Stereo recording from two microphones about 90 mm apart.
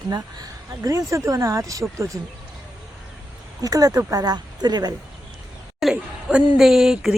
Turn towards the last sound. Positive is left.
turn(degrees=-5)  # may be behind; listen again after turning